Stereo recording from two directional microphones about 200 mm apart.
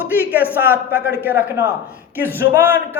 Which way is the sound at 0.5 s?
10° right (ahead or behind).